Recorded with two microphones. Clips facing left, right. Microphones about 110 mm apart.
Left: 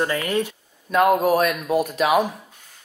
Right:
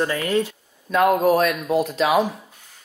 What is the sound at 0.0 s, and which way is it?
Speech, 15° left (ahead or behind).